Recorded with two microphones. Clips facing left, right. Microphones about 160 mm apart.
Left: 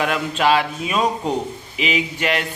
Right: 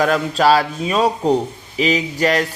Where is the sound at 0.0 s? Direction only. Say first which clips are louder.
Right 4 dB; 40° right (ahead or behind).